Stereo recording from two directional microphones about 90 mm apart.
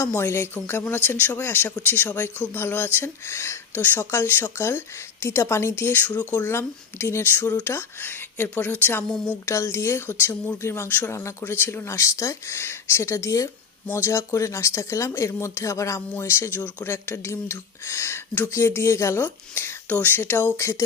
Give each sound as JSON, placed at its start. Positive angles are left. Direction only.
{"t": 0.0, "sound": "speech", "side_deg": 30}
{"t": 6.5, "sound": "speech", "side_deg": 30}